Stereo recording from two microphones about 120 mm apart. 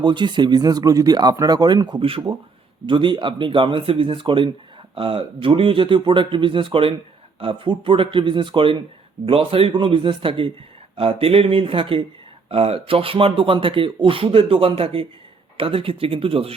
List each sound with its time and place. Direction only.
0.0 s speech: 40° right (ahead or behind)